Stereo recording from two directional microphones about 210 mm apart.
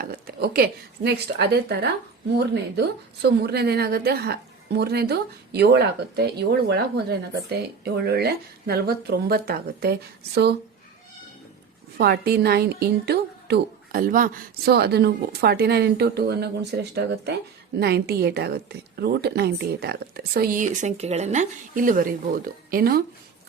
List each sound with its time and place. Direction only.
0.0 s a woman's voice: 45° right (ahead or behind)
11.9 s a woman's voice: 50° right (ahead or behind)